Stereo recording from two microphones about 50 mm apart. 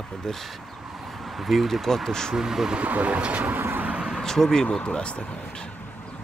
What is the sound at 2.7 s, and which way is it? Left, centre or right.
Speech, right.